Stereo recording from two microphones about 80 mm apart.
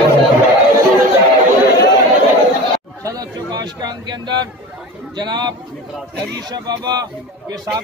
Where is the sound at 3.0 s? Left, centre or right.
Right.